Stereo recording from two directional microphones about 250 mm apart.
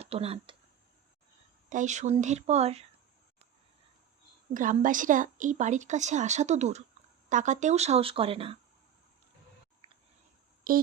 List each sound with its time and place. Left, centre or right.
0.0 s speech: right
1.7 s a woman's voice: right
4.5 s a woman's voice: right
10.7 s a sound: right